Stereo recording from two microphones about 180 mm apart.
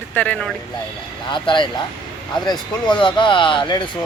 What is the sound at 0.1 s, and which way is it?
Speech, 5° left (ahead or behind).